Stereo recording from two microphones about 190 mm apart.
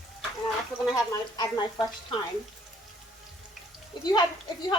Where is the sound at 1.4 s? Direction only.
20° left (ahead or behind).